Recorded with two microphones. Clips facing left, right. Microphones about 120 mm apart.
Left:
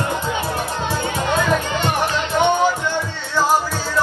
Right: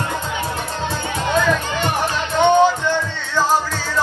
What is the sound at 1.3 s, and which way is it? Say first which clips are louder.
Music: right 1 dB; 15° left (ahead or behind).